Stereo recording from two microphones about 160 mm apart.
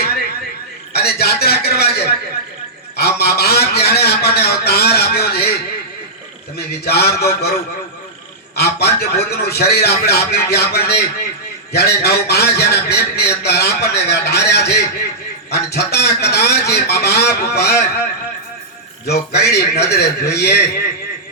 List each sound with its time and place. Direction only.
0.9 s speech: 80° left
6.8 s speech: 90° left
8.5 s a man's voice: 90° left
19.0 s a man's voice: 90° left